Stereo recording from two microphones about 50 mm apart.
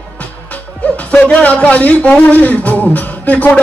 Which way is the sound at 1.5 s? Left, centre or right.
Left.